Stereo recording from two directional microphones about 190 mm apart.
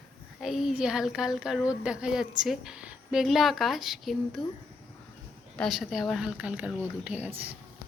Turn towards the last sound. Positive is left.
turn(degrees=-10)  # may be behind; listen again after turning